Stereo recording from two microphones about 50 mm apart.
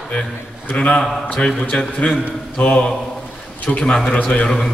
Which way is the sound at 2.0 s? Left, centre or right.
Left.